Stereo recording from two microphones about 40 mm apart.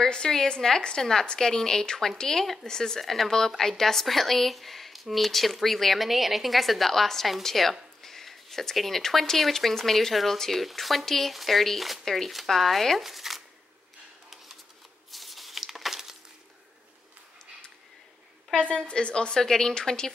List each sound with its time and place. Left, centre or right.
0.0 s a woman's voice: centre
15.0 s a sound: centre
18.5 s a woman's voice: left